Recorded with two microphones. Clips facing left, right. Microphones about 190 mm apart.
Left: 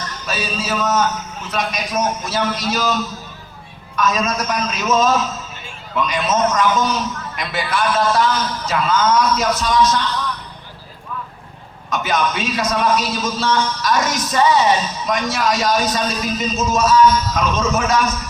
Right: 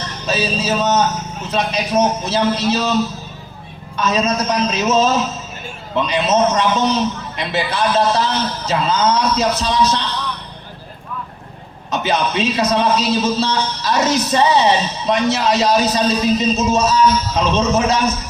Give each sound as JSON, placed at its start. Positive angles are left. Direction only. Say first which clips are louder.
{"t": 0.3, "sound": "a man's voice", "louder": "right 5 dB", "side_deg": -25}
{"t": 11.9, "sound": "a man's voice", "louder": "right 1 dB", "side_deg": -30}
{"t": 13.6, "sound": "a man's voice", "louder": "even", "side_deg": -35}